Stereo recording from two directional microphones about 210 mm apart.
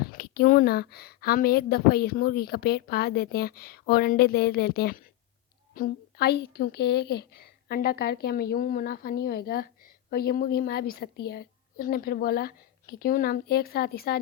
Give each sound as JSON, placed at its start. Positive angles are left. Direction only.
{"t": 0.0, "sound": "a woman's voice", "side_deg": 45}